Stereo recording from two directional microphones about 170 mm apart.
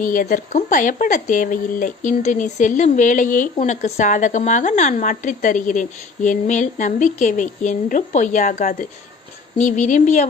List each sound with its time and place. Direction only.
0.0 s a woman's voice: 55° left (ahead or behind)